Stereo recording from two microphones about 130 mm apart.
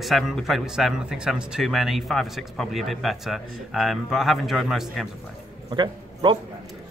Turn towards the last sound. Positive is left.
turn(degrees=-35)  # may be behind; listen again after turning